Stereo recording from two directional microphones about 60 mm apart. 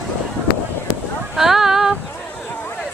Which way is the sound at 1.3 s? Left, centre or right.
Centre.